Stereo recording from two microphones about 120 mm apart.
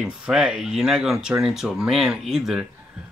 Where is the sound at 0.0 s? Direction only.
5° right (ahead or behind).